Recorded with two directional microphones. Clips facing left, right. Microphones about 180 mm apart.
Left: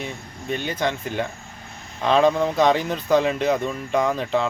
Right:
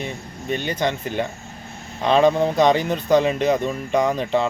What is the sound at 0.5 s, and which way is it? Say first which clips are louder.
Speech: right 2 dB; centre (ahead or behind).